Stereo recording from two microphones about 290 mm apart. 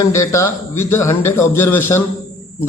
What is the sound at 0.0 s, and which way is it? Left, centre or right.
A man's voice, centre.